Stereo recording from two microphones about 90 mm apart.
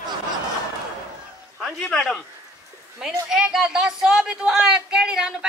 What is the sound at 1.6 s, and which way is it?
Speech, centre (ahead or behind).